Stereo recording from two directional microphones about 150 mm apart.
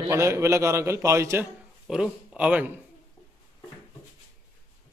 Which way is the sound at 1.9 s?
5° right (ahead or behind).